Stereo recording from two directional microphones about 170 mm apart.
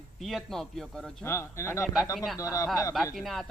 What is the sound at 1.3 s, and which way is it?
Speech, 15° left (ahead or behind).